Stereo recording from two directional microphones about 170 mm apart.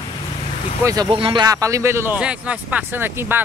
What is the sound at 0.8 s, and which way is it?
Speech, 20° right (ahead or behind).